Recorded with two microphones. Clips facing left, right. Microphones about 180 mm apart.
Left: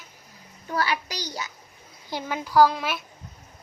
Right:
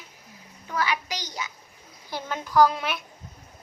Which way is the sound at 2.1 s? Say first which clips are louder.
Left 2 dB; 10° left (ahead or behind).